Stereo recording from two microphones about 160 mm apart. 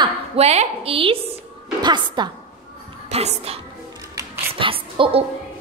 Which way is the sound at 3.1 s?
40° right (ahead or behind).